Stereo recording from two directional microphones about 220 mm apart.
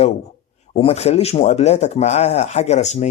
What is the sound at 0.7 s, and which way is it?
Speech, 30° left (ahead or behind).